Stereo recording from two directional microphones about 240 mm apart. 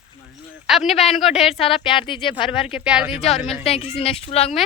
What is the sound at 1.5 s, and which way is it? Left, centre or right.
Speech, left.